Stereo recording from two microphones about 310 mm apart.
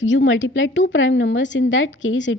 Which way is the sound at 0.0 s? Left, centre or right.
Left.